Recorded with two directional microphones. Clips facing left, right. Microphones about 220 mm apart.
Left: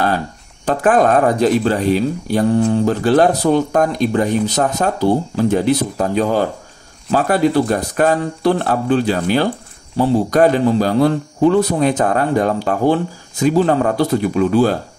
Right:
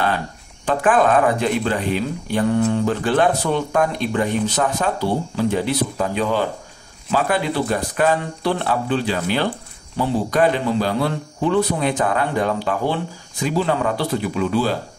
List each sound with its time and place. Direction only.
0.7 s a man's voice: 40° left (ahead or behind)